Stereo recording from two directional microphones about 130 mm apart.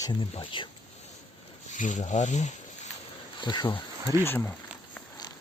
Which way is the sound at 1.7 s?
70° left (ahead or behind).